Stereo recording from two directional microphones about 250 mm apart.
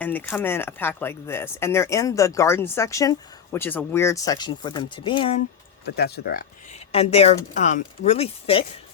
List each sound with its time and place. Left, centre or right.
0.0 s speech: centre
5.8 s speech: left
6.7 s speech: left